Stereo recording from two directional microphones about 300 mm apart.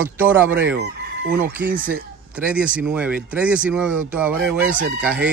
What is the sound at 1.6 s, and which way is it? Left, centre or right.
Speech, right.